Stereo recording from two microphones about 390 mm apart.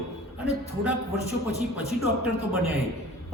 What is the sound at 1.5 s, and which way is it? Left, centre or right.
Speech, centre.